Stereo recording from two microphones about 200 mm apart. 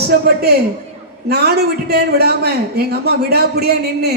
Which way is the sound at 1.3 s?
55° right (ahead or behind).